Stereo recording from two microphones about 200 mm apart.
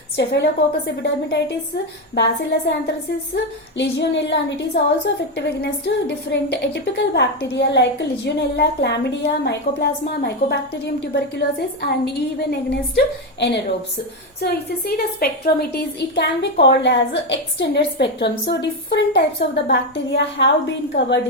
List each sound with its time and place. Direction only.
0.2 s a woman's voice: 60° left (ahead or behind)
14.4 s a woman's voice: 50° left (ahead or behind)